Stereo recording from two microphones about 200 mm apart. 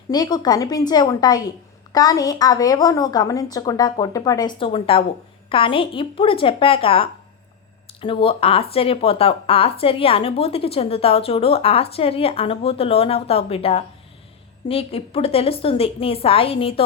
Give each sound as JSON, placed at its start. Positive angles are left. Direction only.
{"t": 0.1, "sound": "speech", "side_deg": 20}